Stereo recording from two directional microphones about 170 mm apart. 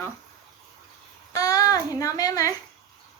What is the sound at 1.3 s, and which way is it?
Speech, 20° left (ahead or behind).